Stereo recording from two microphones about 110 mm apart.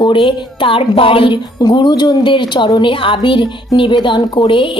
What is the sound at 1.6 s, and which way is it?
Speech, 40° left (ahead or behind).